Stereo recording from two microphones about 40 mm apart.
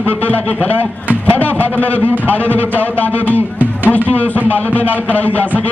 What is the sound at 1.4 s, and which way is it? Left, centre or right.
Speech, left.